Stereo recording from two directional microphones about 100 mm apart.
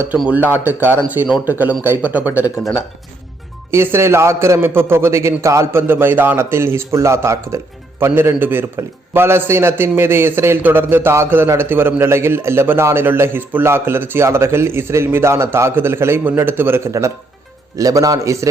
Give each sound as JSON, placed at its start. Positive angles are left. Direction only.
{"t": 0.6, "sound": "speech", "side_deg": -20}
{"t": 3.7, "sound": "speech", "side_deg": -25}
{"t": 5.9, "sound": "a man's voice", "side_deg": -20}